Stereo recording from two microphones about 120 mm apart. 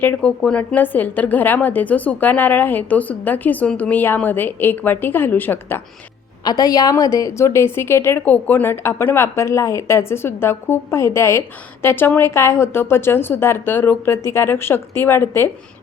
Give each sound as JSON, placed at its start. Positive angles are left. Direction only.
{"t": 0.0, "sound": "speech", "side_deg": 15}
{"t": 6.4, "sound": "a woman's voice", "side_deg": 35}